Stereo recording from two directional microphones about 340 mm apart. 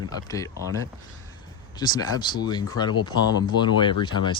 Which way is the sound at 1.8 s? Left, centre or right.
Centre.